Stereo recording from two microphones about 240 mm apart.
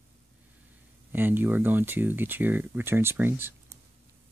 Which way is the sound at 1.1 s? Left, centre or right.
Centre.